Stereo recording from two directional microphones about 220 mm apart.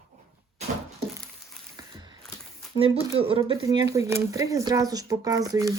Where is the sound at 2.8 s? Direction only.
25° right (ahead or behind).